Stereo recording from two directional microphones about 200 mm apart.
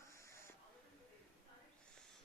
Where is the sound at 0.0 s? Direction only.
15° left (ahead or behind).